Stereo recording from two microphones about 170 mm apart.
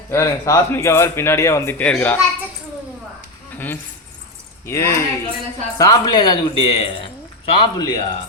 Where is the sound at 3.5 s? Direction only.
10° left (ahead or behind); by 7.0 s 30° left (ahead or behind).